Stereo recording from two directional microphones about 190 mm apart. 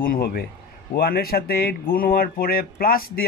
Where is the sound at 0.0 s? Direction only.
50° left (ahead or behind).